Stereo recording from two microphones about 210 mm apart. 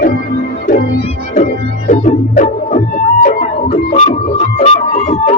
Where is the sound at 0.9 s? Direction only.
30° left (ahead or behind).